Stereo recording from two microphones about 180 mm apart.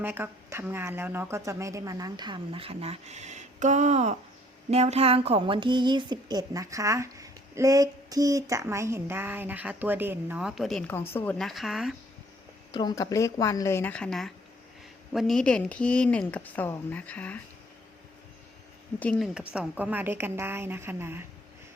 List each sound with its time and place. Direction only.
0.0 s a woman's voice: 10° right (ahead or behind)
12.7 s speech: 20° left (ahead or behind)
18.9 s speech: 5° left (ahead or behind)
19.5 s speech: 10° right (ahead or behind)